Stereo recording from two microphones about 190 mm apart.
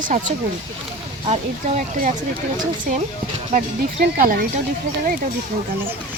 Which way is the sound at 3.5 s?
45° right (ahead or behind).